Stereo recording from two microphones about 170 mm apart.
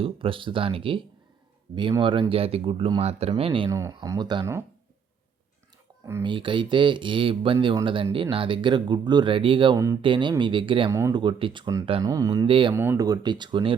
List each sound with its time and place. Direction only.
0.0 s speech: 30° right (ahead or behind)
3.7 s speech: 20° right (ahead or behind)
6.2 s speech: 30° right (ahead or behind)
9.7 s speech: 20° right (ahead or behind)
10.9 s speech: 15° right (ahead or behind)
11.2 s speech: 30° right (ahead or behind)
12.7 s speech: 15° right (ahead or behind)